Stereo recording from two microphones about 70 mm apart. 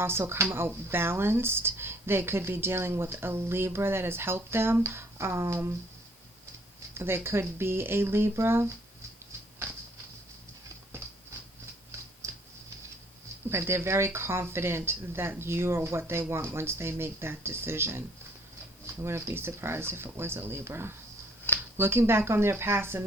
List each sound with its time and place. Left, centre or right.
0.0 s speech: right
6.9 s speech: right
13.5 s speech: right
19.0 s speech: right